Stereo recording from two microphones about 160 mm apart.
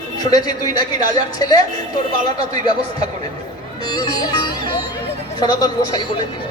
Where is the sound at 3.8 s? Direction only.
25° left (ahead or behind).